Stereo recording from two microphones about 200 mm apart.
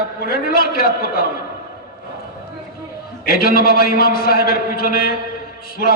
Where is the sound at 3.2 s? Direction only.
50° left (ahead or behind).